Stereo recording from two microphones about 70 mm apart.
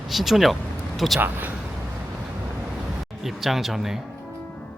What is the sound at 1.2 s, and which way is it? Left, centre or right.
Speech, right.